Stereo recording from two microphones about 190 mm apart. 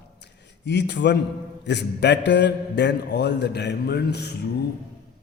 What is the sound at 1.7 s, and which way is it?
A man's voice, 65° left (ahead or behind).